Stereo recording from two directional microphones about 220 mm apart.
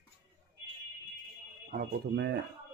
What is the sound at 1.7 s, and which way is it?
Speech, 50° right (ahead or behind).